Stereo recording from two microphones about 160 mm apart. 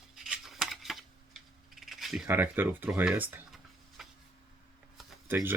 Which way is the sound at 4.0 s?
Centre (ahead or behind).